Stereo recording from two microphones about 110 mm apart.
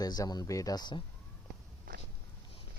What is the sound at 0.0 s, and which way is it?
Speech, 35° left (ahead or behind).